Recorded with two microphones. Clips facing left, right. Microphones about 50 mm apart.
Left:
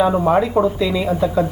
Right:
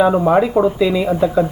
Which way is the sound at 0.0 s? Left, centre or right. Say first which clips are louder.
Right 2 dB; centre.